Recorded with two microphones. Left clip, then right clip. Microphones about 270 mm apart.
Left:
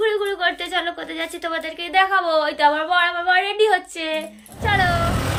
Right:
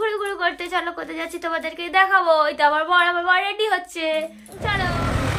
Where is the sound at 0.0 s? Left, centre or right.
Centre.